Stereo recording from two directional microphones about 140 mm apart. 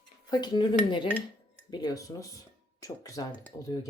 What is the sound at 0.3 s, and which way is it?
Speech, 30° left (ahead or behind).